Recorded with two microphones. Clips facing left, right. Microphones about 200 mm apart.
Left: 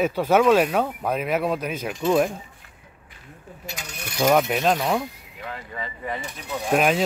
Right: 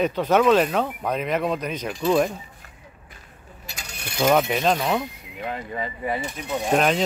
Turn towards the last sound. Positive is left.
turn(degrees=5)  # may be behind; listen again after turning